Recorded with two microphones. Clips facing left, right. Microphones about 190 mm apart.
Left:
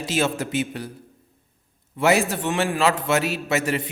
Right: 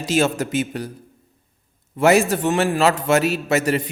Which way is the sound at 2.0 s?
45° right (ahead or behind).